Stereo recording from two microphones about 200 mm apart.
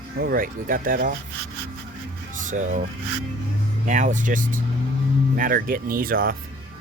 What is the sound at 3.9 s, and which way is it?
Speech, 40° right (ahead or behind).